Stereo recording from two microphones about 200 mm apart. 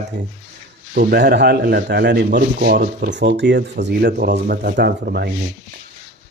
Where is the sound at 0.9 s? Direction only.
55° right (ahead or behind).